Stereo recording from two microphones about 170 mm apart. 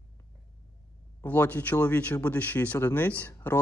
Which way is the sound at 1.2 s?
10° left (ahead or behind).